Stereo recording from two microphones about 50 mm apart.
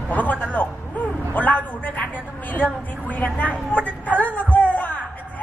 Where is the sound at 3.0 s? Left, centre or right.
Left.